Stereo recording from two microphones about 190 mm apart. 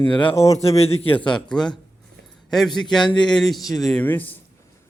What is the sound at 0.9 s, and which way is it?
Speech, 30° left (ahead or behind).